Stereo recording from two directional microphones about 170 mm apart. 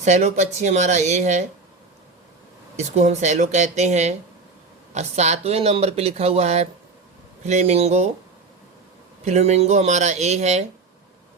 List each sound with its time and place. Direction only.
0.0 s speech: 45° right (ahead or behind)
2.7 s speech: 40° right (ahead or behind)
9.2 s speech: 40° right (ahead or behind)